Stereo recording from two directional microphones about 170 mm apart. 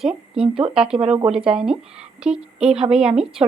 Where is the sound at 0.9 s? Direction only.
30° right (ahead or behind).